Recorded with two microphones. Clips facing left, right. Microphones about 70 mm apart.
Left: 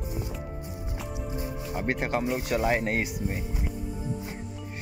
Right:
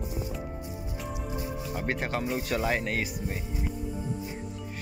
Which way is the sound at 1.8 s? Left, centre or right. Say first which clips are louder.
Left 3 dB; centre.